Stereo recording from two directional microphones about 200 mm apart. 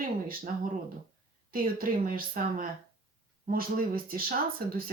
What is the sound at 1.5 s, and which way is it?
Speech, 45° right (ahead or behind).